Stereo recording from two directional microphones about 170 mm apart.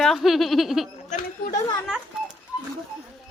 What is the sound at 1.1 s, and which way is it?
Chatter, 45° left (ahead or behind).